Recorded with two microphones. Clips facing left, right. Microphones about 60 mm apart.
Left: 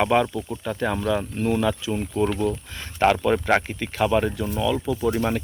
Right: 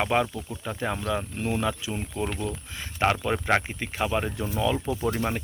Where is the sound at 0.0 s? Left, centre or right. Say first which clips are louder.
Left 5 dB; centre.